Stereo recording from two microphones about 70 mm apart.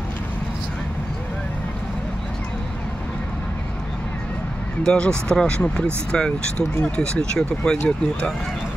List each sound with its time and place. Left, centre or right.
4.8 s speech: centre